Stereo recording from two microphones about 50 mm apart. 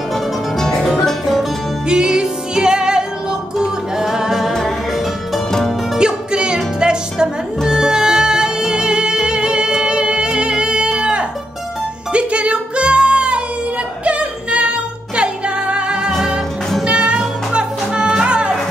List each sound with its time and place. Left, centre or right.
0.1 s music: centre
1.0 s music: centre
1.9 s music: centre
5.9 s music: centre